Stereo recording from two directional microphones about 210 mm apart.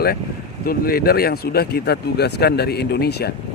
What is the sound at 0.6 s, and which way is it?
Speech, 45° left (ahead or behind).